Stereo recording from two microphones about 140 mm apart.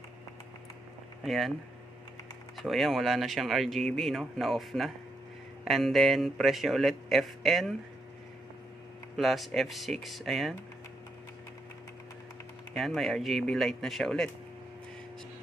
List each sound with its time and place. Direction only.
1.2 s speech: centre (ahead or behind)
2.5 s speech: centre (ahead or behind)
9.1 s speech: centre (ahead or behind)
12.7 s speech: centre (ahead or behind)